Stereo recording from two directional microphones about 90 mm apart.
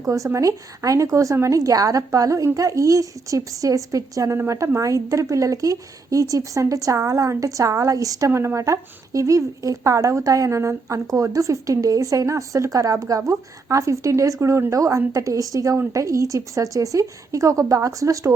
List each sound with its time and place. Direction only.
0.0 s speech: 35° right (ahead or behind)